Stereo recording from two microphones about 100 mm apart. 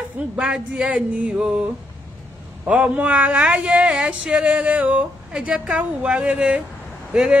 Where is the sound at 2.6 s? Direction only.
10° right (ahead or behind).